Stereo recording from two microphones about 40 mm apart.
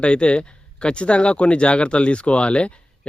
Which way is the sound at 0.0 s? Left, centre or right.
Left.